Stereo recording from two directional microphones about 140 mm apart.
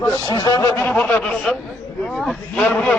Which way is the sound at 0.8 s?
10° left (ahead or behind).